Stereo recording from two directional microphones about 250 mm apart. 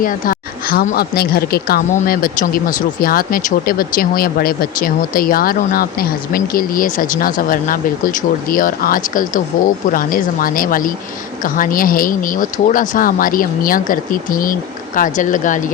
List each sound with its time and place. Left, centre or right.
0.0 s speech: left